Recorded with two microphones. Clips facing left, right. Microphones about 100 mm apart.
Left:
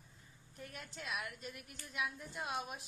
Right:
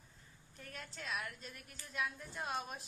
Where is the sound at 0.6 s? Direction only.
10° left (ahead or behind).